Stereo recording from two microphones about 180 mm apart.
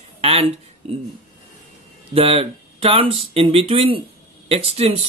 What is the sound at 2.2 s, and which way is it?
Speech, 30° right (ahead or behind).